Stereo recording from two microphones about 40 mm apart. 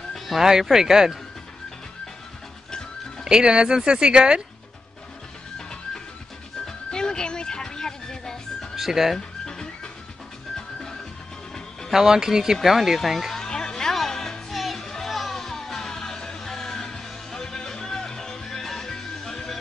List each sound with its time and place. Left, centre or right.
0.1 s fowl: centre
0.5 s speech: centre
3.3 s speech: centre
6.6 s music: centre
8.7 s speech: centre
11.9 s speech: centre
13.4 s a sound: centre
13.9 s music: centre